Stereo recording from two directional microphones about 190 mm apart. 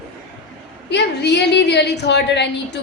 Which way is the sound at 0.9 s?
65° left (ahead or behind).